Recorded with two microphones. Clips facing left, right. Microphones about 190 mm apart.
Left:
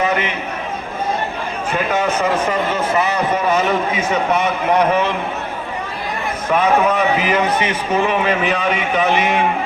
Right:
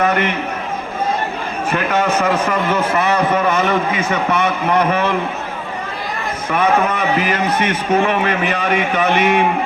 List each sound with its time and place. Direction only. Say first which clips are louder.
0.0 s a man's voice: right 2 dB; 55° right (ahead or behind)
1.7 s a man's voice: right 1 dB; 55° right (ahead or behind)
6.5 s a man's voice: left 1 dB; 55° right (ahead or behind)